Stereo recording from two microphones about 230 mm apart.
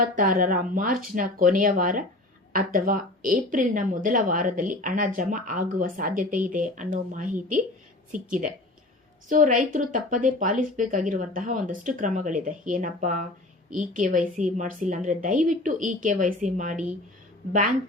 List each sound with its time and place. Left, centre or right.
0.0 s a woman's voice: right